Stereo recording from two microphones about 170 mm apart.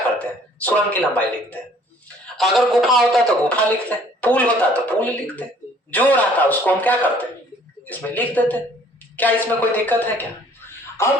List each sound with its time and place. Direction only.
0.2 s a man's voice: 10° left (ahead or behind)